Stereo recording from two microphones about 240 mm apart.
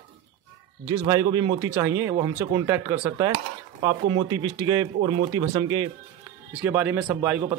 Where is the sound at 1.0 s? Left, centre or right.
Centre.